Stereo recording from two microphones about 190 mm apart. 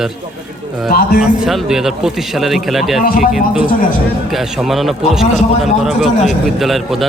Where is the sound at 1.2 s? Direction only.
Centre (ahead or behind).